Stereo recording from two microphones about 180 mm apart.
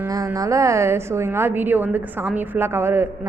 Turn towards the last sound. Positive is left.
turn(degrees=-15)  # may be behind; listen again after turning